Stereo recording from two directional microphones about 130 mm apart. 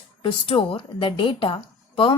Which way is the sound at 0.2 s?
40° left (ahead or behind).